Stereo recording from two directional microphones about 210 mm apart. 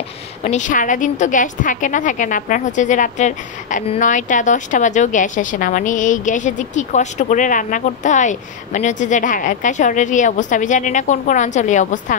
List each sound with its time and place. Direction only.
0.4 s a woman's voice: 35° left (ahead or behind)